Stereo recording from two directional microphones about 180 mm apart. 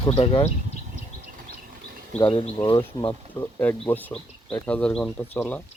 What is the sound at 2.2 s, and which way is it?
Speech, 30° left (ahead or behind).